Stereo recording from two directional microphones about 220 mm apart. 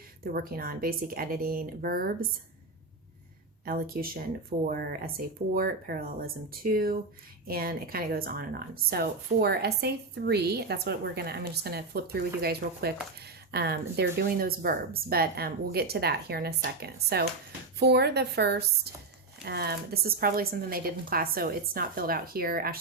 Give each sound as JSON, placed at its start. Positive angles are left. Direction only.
{"t": 0.3, "sound": "speech", "side_deg": -40}
{"t": 3.7, "sound": "speech", "side_deg": -40}